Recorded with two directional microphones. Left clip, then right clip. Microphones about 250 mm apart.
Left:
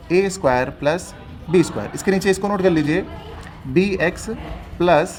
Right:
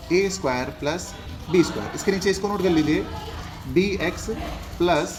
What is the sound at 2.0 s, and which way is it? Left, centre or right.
Speech, left.